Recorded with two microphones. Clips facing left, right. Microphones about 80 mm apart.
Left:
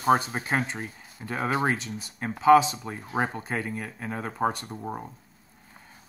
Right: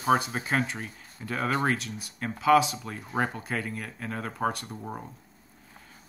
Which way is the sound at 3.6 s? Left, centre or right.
Centre.